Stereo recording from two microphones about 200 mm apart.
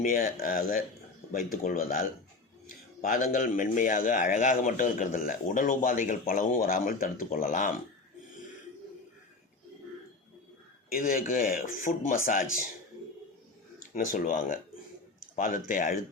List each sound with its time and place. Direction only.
0.0 s speech: 45° left (ahead or behind)
2.6 s a sound: 40° left (ahead or behind)
3.3 s a man's voice: 40° left (ahead or behind)
10.9 s speech: 45° left (ahead or behind)
13.9 s a man's voice: 45° left (ahead or behind)